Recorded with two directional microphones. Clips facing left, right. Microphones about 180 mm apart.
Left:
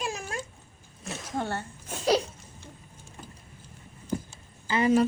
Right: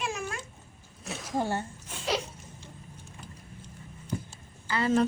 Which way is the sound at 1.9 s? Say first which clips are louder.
Left 7 dB; 40° left (ahead or behind).